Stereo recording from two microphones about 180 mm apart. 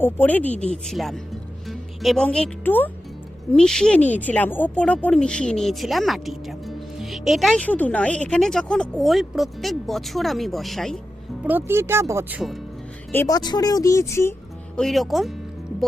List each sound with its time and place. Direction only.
0.0 s speech: 10° left (ahead or behind)
11.4 s speech: 10° right (ahead or behind)
13.1 s speech: 15° left (ahead or behind)
14.8 s speech: centre (ahead or behind)